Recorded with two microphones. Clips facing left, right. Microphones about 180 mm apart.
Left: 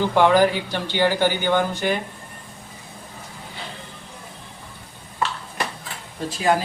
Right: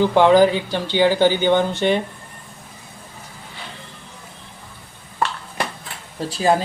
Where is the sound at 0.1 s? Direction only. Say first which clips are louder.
Even; 20° right (ahead or behind).